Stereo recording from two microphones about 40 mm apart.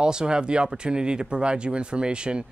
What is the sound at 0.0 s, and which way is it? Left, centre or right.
Speech, centre.